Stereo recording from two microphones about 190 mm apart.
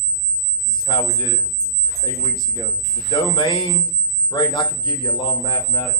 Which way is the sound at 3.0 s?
25° left (ahead or behind).